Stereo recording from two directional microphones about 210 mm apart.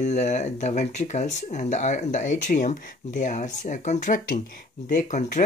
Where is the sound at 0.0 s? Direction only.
35° left (ahead or behind).